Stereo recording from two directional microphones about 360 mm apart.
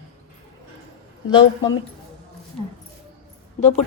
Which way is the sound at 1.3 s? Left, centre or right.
Centre.